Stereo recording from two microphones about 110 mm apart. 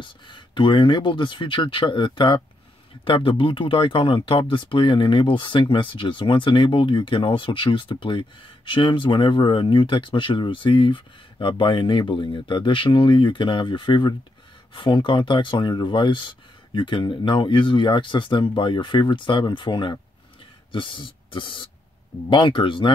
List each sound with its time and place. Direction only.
0.0 s a man's voice: 50° left (ahead or behind)